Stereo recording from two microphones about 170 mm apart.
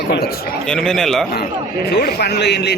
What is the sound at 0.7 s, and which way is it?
Speech, 5° left (ahead or behind).